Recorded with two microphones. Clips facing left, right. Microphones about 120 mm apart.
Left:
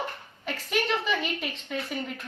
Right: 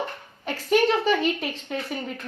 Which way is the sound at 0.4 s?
35° right (ahead or behind).